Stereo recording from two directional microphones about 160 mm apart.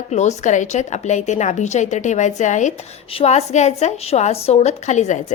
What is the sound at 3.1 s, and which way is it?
A woman's voice, 40° left (ahead or behind).